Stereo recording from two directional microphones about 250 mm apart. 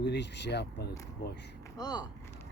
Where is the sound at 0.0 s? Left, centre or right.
Left.